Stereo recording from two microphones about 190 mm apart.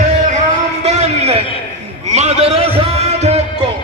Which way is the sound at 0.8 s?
35° right (ahead or behind).